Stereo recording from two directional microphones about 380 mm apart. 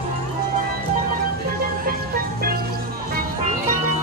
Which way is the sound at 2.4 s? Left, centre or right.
Right.